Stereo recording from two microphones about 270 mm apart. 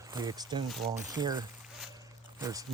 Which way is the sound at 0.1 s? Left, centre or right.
Centre.